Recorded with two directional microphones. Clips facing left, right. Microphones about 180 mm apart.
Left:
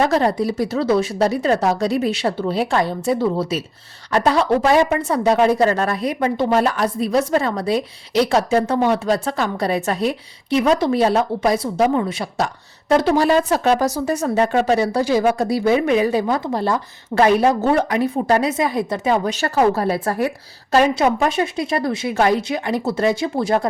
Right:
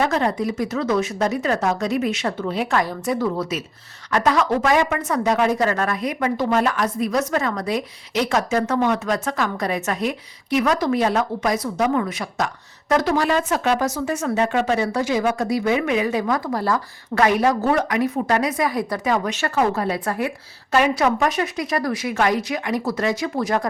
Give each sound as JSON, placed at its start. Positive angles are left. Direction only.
{"t": 0.0, "sound": "speech", "side_deg": 35}